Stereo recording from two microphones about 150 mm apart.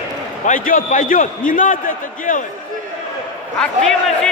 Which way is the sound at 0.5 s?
65° left (ahead or behind).